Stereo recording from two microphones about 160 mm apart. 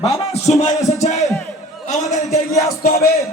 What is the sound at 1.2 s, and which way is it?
Crowd, centre (ahead or behind).